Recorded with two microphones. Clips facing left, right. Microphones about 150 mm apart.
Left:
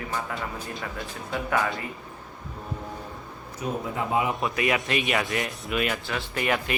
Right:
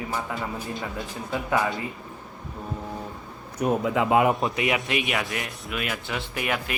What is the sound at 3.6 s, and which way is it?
Speech, 80° right.